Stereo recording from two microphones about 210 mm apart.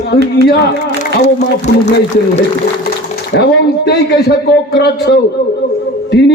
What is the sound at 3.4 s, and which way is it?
A man's voice, 50° left (ahead or behind).